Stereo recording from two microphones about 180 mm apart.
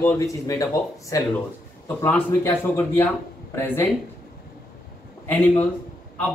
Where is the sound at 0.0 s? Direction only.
15° left (ahead or behind).